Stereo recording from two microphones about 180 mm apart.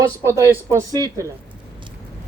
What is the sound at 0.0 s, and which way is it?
Speech, 15° right (ahead or behind).